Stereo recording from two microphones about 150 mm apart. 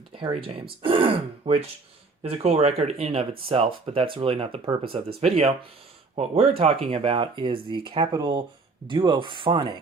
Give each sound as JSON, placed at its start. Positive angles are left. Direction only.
{"t": 0.1, "sound": "speech", "side_deg": -35}